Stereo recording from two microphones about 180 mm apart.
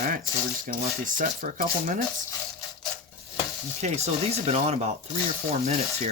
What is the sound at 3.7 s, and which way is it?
Speech, 35° right (ahead or behind).